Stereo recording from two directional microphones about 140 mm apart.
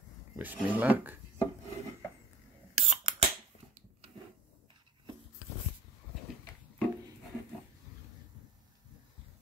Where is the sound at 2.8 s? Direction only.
55° right (ahead or behind).